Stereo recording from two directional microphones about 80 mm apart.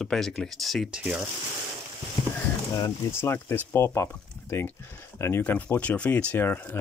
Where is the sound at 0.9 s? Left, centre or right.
Centre.